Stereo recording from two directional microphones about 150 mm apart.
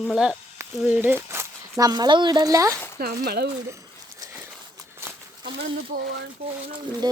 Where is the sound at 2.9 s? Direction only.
90° right.